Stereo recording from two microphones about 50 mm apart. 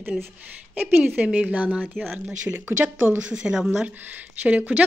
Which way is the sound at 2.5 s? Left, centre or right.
Right.